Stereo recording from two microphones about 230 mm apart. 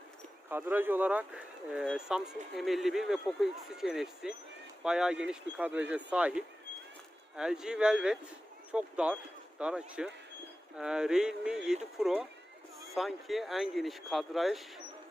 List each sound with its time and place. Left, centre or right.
0.5 s speech: centre